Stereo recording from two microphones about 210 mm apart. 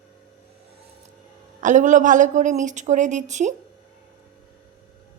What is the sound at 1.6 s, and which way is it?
A woman's voice, 35° right (ahead or behind).